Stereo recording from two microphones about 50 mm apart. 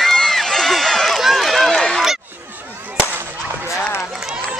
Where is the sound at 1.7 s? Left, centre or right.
Centre.